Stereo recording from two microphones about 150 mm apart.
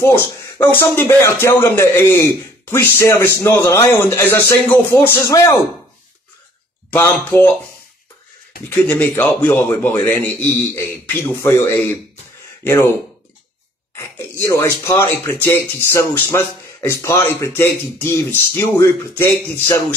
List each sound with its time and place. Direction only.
0.0 s speech: 15° left (ahead or behind)
6.9 s speech: 15° left (ahead or behind)
8.6 s speech: 15° left (ahead or behind)
14.4 s speech: 20° left (ahead or behind)